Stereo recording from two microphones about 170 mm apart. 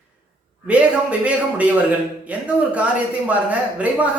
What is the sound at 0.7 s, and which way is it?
Speech, 5° right (ahead or behind).